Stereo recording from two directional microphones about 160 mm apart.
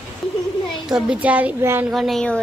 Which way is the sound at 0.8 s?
5° right (ahead or behind).